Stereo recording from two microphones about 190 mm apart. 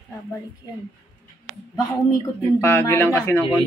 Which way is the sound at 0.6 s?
20° left (ahead or behind).